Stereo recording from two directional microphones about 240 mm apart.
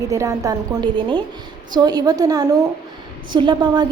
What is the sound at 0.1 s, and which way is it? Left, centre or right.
A woman's voice, centre.